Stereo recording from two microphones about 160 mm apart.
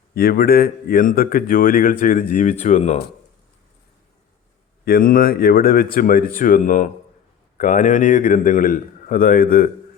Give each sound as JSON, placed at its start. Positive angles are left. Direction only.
{"t": 0.1, "sound": "speech", "side_deg": 70}
{"t": 4.9, "sound": "speech", "side_deg": 65}